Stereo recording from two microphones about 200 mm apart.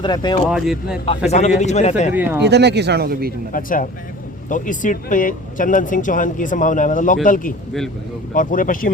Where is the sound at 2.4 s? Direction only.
55° right (ahead or behind).